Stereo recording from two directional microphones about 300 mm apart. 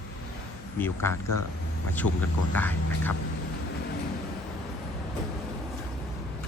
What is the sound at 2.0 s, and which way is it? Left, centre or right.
Speech, left.